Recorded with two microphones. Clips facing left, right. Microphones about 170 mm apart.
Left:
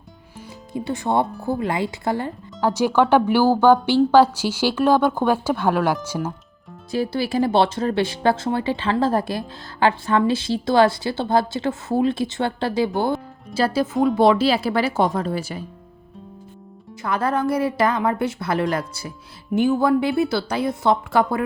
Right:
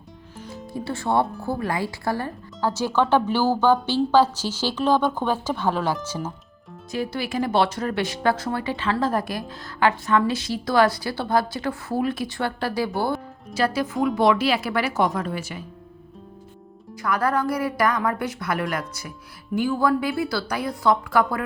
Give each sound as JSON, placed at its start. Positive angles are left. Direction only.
{"t": 0.3, "sound": "music", "side_deg": 10}
{"t": 0.7, "sound": "speech", "side_deg": 20}
{"t": 6.9, "sound": "a woman's voice", "side_deg": 30}
{"t": 13.5, "sound": "a woman's voice", "side_deg": 30}
{"t": 16.9, "sound": "a woman's voice", "side_deg": 25}